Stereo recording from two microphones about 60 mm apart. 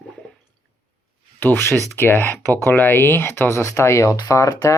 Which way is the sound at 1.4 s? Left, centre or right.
Left.